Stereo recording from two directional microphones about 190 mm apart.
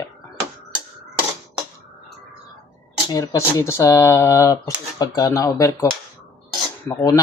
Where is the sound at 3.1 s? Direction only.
15° left (ahead or behind).